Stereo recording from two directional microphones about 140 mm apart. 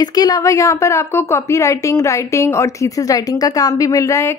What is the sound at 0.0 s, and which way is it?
A woman's voice, 25° left (ahead or behind).